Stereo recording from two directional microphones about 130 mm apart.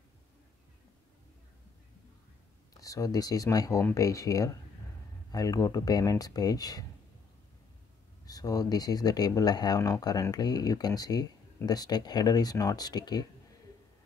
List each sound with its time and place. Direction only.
2.8 s speech: 25° left (ahead or behind)
8.3 s speech: 30° left (ahead or behind)